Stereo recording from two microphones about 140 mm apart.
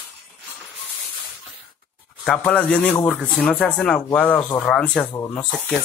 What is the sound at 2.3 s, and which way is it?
Speech, 10° left (ahead or behind).